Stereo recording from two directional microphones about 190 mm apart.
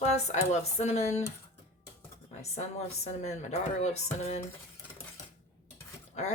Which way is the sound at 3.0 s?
35° left (ahead or behind).